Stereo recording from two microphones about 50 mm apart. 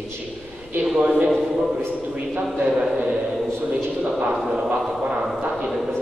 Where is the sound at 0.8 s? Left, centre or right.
Centre.